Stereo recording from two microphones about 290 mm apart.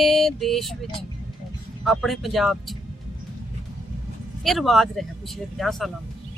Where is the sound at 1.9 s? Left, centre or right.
Centre.